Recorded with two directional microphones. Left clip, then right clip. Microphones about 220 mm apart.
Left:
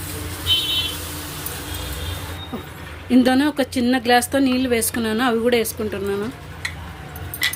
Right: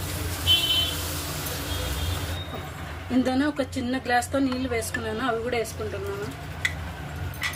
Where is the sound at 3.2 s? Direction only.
40° left (ahead or behind).